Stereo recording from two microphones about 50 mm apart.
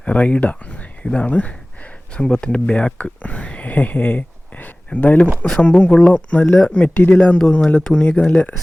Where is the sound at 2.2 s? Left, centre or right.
Centre.